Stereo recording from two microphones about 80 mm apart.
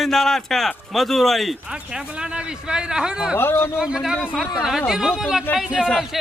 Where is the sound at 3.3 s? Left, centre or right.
Left.